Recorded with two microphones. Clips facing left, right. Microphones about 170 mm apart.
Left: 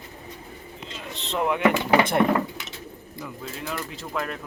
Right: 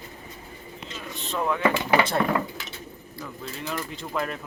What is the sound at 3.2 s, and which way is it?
Speech, centre (ahead or behind).